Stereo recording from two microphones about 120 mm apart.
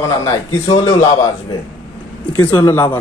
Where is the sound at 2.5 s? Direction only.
20° left (ahead or behind).